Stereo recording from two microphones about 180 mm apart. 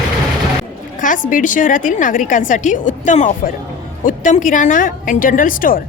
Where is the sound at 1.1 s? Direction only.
45° left (ahead or behind).